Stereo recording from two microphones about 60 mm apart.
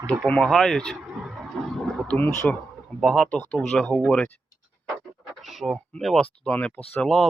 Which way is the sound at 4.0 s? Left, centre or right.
Centre.